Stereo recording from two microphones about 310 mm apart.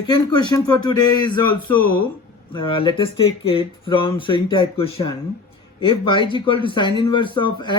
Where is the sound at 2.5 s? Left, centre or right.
Centre.